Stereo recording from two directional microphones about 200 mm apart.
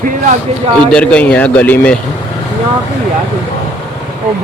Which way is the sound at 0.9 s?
5° left (ahead or behind).